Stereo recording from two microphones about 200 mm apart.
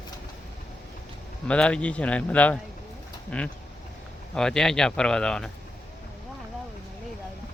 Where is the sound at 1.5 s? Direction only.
5° left (ahead or behind).